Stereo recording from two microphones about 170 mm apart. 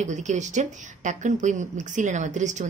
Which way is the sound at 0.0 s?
45° right (ahead or behind).